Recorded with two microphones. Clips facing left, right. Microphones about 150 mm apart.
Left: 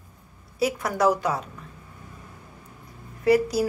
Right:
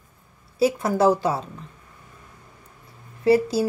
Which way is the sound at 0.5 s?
30° right (ahead or behind).